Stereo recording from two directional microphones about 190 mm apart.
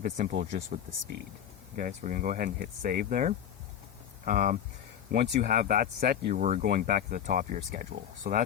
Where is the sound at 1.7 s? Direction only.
45° right (ahead or behind).